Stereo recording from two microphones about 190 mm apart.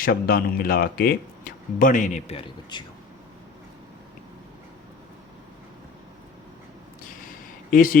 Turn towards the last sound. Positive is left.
turn(degrees=45)  # may be behind; listen again after turning